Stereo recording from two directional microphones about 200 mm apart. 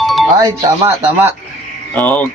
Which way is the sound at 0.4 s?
20° right (ahead or behind).